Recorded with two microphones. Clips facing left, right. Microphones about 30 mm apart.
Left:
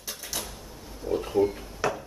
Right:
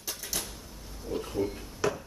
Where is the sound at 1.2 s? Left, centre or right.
Left.